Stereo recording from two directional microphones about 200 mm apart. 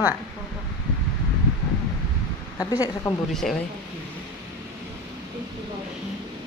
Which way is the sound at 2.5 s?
20° left (ahead or behind).